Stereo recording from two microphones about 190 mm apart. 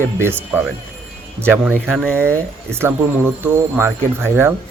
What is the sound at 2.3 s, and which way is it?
Speech, 10° right (ahead or behind).